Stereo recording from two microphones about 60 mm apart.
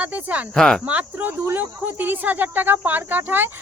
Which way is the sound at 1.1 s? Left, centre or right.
Right.